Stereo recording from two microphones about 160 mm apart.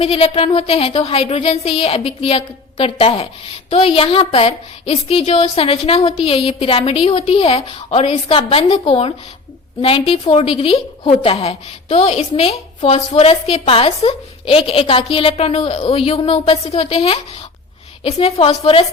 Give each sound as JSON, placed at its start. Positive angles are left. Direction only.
{"t": 0.0, "sound": "a woman's voice", "side_deg": 40}